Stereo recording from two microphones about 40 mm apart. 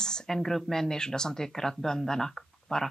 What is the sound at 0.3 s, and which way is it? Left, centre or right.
Speech, centre.